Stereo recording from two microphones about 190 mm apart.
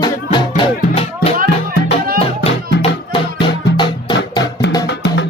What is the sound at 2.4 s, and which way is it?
Music, 30° left (ahead or behind).